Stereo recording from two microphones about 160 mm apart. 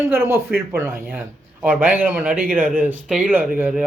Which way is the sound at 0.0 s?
15° right (ahead or behind).